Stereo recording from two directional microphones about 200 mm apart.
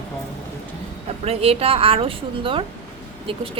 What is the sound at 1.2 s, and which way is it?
A woman's voice, 30° right (ahead or behind).